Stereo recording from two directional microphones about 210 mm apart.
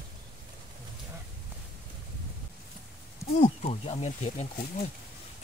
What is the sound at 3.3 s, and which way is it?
Speech, 25° left (ahead or behind).